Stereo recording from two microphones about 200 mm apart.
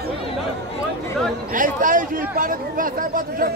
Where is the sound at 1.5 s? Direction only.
40° right (ahead or behind).